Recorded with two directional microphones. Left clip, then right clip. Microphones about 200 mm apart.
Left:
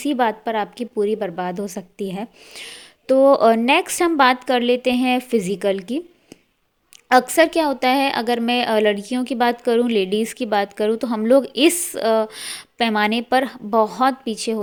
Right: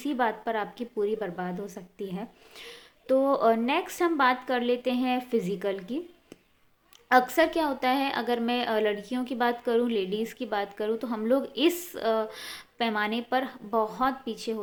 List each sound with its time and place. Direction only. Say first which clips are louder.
0.0 s a woman's voice: left 8 dB; 40° left (ahead or behind)
7.1 s a woman's voice: left 7 dB; 40° left (ahead or behind)